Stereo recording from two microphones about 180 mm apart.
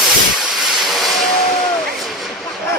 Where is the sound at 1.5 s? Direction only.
5° left (ahead or behind).